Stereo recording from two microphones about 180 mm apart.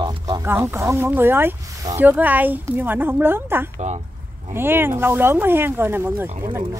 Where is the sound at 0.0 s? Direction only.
25° right (ahead or behind).